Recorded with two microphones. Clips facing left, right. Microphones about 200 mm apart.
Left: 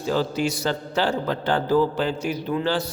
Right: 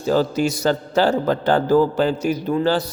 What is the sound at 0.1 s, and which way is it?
A man's voice, 45° right (ahead or behind).